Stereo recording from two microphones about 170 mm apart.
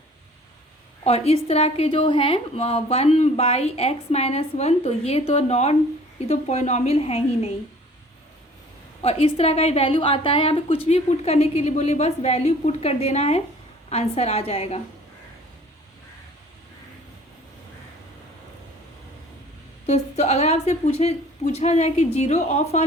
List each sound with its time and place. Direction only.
1.0 s a woman's voice: 35° left (ahead or behind)
9.0 s a woman's voice: 35° left (ahead or behind)
19.9 s a woman's voice: 40° left (ahead or behind)